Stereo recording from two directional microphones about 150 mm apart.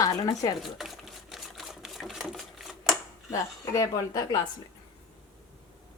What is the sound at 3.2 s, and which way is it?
A woman's voice, 25° left (ahead or behind).